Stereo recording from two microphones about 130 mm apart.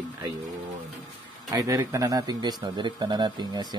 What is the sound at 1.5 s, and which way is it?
A man's voice, 25° right (ahead or behind).